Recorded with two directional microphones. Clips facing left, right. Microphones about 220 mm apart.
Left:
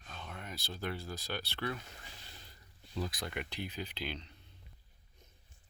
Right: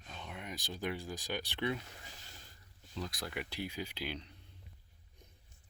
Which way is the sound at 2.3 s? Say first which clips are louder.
Left 1 dB; 45° right (ahead or behind).